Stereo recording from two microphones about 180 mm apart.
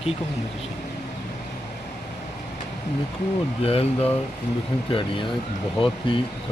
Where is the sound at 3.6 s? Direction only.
35° left (ahead or behind).